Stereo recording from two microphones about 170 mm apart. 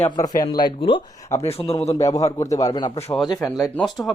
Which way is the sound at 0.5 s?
25° left (ahead or behind).